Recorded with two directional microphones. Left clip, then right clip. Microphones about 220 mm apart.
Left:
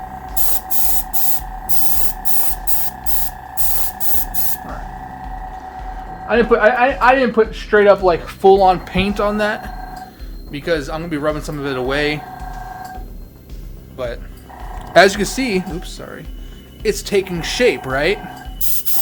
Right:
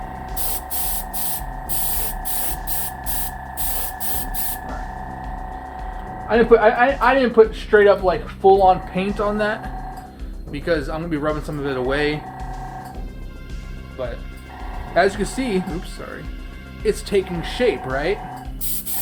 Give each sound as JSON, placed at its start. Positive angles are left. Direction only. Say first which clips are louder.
{"t": 6.2, "sound": "speech", "louder": "left 1 dB", "side_deg": 35}
{"t": 8.0, "sound": "speech", "louder": "left 3 dB", "side_deg": 60}
{"t": 10.5, "sound": "speech", "louder": "left 2 dB", "side_deg": 20}
{"t": 14.0, "sound": "speech", "louder": "left 4 dB", "side_deg": 30}
{"t": 14.9, "sound": "speech", "louder": "left 7 dB", "side_deg": 45}
{"t": 15.4, "sound": "speech", "louder": "left 3 dB", "side_deg": 25}